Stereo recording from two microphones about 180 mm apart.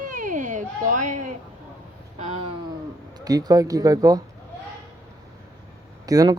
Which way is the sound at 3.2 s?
20° right (ahead or behind).